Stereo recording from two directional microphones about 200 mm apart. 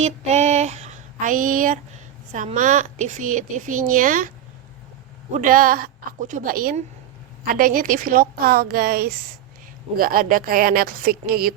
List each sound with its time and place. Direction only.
0.0 s a sound: 35° right (ahead or behind)
2.3 s a woman's voice: 40° right (ahead or behind)
5.3 s a woman's voice: 40° right (ahead or behind)